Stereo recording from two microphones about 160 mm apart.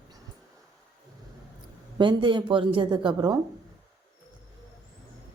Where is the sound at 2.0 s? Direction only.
30° right (ahead or behind).